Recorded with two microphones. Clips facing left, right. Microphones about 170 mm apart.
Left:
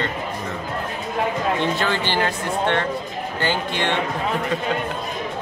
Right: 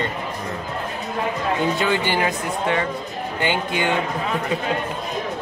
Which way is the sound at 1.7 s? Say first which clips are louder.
Right 1 dB; 10° right (ahead or behind).